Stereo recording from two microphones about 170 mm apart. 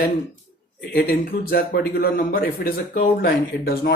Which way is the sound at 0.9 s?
60° left (ahead or behind).